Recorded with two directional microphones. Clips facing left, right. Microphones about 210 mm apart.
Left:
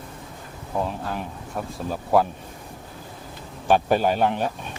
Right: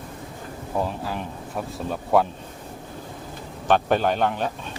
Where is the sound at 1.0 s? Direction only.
Centre (ahead or behind).